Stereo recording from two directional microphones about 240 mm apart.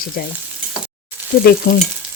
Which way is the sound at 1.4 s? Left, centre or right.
Left.